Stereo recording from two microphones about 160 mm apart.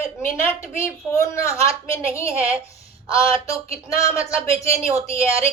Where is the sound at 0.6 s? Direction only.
15° left (ahead or behind).